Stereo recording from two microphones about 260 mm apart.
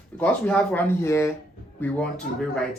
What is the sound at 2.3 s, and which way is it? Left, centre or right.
Speech, left.